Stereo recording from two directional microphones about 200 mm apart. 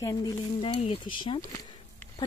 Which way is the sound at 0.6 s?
25° left (ahead or behind).